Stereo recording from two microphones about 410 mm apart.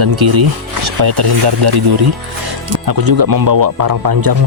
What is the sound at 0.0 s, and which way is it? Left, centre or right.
Speech, right.